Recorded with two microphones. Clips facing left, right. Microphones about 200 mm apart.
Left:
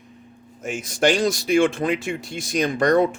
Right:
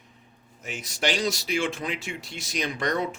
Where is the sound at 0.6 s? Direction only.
50° left (ahead or behind).